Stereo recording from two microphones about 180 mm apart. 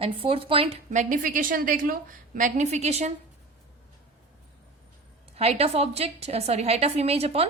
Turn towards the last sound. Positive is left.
turn(degrees=-35)  # may be behind; listen again after turning